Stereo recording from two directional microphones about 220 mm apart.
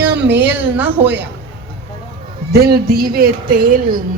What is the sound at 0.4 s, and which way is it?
Speech, 10° right (ahead or behind).